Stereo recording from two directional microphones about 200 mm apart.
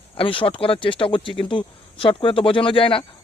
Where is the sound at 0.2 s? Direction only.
25° left (ahead or behind).